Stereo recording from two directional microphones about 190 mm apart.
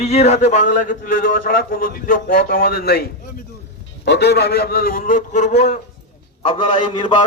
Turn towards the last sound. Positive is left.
turn(degrees=25)  # may be behind; listen again after turning